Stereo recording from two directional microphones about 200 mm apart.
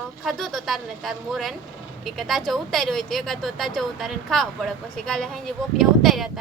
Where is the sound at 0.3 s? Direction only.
Centre (ahead or behind).